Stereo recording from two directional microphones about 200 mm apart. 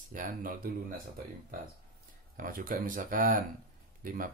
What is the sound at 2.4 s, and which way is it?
Speech, 45° right (ahead or behind).